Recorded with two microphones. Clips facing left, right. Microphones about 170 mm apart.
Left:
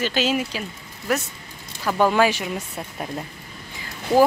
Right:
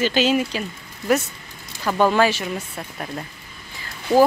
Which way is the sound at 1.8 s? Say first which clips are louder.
Right 1 dB; 5° left (ahead or behind).